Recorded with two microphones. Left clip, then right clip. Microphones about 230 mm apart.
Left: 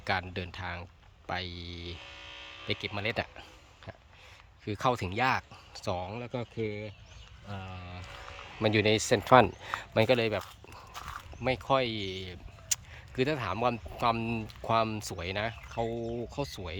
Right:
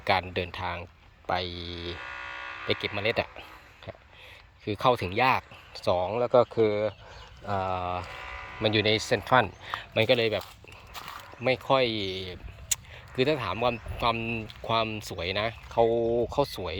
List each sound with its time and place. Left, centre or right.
0.0 s speech: centre
2.0 s electric shaver: centre
2.8 s speech: centre
4.6 s speech: centre
7.4 s speech: right
8.6 s speech: centre
10.9 s a sound: right
11.4 s speech: centre